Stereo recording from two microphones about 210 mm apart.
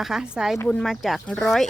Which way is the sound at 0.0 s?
5° right (ahead or behind).